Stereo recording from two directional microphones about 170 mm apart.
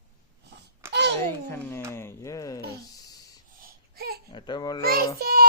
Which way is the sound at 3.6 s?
60° right (ahead or behind).